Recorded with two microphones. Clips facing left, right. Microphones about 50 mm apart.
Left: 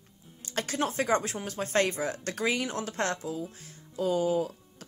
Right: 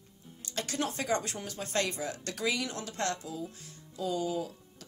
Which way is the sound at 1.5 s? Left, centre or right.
Left.